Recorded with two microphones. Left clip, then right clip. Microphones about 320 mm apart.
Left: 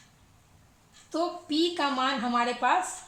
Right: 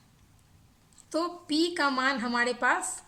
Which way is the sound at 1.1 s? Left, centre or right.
Right.